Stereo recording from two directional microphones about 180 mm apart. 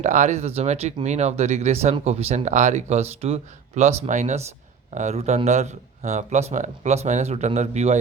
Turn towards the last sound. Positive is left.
turn(degrees=-40)  # may be behind; listen again after turning